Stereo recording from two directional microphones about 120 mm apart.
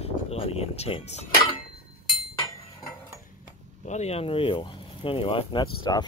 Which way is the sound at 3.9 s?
65° left (ahead or behind).